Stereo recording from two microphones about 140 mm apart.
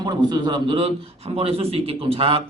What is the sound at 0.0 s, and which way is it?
A man's voice, 30° right (ahead or behind).